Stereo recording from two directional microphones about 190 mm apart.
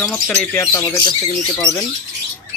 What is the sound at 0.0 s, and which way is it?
Speech, 5° left (ahead or behind).